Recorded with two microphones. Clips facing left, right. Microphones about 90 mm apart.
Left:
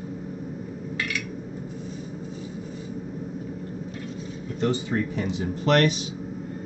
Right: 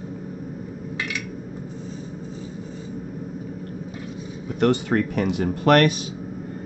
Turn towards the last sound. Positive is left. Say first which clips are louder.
# right 4 dB
turn(degrees=-60)  # may be behind; listen again after turning